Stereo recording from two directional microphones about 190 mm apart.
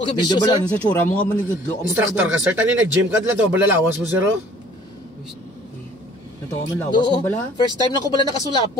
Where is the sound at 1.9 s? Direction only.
10° right (ahead or behind).